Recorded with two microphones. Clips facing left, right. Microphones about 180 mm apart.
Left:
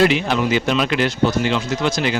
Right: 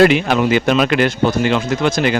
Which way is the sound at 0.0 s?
55° right (ahead or behind).